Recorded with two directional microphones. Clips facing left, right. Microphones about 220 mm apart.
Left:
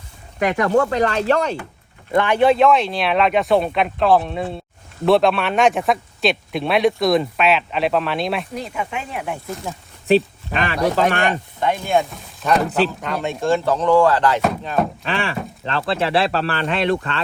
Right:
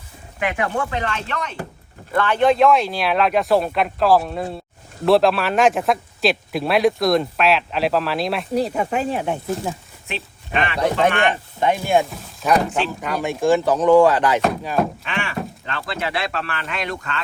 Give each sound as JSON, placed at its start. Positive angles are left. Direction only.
{"t": 0.3, "sound": "speech", "side_deg": 40}
{"t": 2.1, "sound": "a man's voice", "side_deg": 15}
{"t": 8.5, "sound": "speech", "side_deg": -35}
{"t": 10.5, "sound": "speech", "side_deg": 40}
{"t": 11.6, "sound": "speech", "side_deg": -15}
{"t": 12.1, "sound": "a sound", "side_deg": 0}
{"t": 13.0, "sound": "speech", "side_deg": -5}
{"t": 14.4, "sound": "a man's voice", "side_deg": -5}
{"t": 15.0, "sound": "speech", "side_deg": 35}